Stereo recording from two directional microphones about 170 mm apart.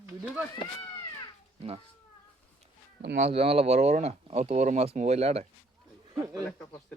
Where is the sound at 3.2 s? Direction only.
35° right (ahead or behind).